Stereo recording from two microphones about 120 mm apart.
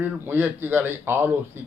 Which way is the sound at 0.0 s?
15° right (ahead or behind).